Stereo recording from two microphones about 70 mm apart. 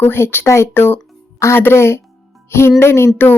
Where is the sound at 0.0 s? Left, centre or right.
Left.